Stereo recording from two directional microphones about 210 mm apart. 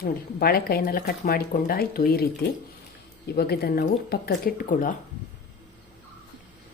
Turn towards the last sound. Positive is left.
turn(degrees=40)  # may be behind; listen again after turning